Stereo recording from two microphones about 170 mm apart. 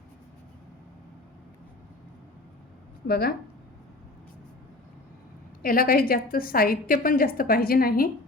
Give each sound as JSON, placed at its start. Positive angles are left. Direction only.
{"t": 3.1, "sound": "speech", "side_deg": 65}
{"t": 5.6, "sound": "a woman's voice", "side_deg": 55}